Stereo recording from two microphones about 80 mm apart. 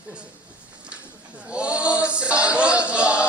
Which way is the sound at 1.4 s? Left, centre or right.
Centre.